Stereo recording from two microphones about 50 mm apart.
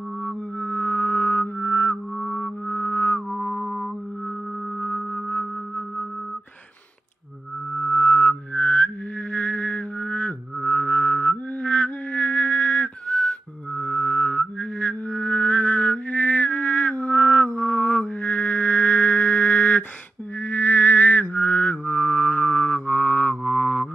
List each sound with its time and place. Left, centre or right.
0.2 s music: left
2.2 s music: left
2.7 s music: left
4.8 s music: left
7.7 s music: left
20.4 s mantra: left